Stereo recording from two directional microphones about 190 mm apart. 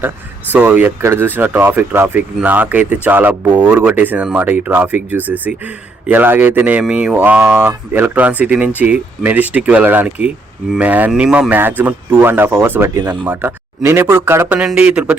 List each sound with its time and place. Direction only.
0.5 s speech: 10° right (ahead or behind)